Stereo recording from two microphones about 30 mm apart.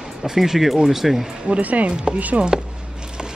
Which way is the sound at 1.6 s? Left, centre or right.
Right.